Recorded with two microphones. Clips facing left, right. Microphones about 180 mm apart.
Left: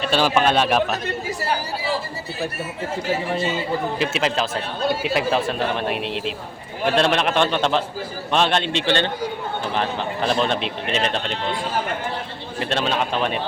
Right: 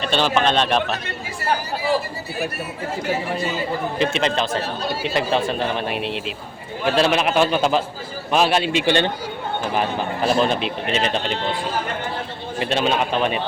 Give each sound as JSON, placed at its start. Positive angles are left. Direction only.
{"t": 0.0, "sound": "a man's voice", "side_deg": 5}
{"t": 3.9, "sound": "a man's voice", "side_deg": 5}
{"t": 12.5, "sound": "speech", "side_deg": -5}